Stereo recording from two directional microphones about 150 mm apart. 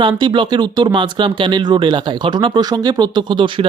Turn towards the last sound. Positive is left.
turn(degrees=-30)  # may be behind; listen again after turning